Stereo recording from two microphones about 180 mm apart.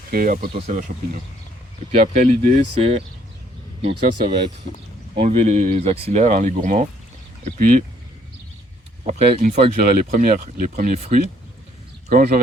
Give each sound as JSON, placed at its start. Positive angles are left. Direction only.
{"t": 0.1, "sound": "speech", "side_deg": -55}
{"t": 2.1, "sound": "speech", "side_deg": -35}
{"t": 9.0, "sound": "speech", "side_deg": -35}